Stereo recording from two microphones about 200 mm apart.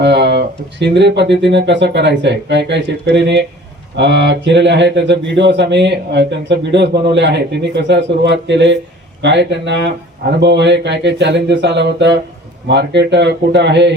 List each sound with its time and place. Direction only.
0.0 s speech: 60° right (ahead or behind)